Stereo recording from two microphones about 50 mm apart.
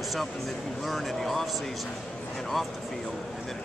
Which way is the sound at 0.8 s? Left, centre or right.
Centre.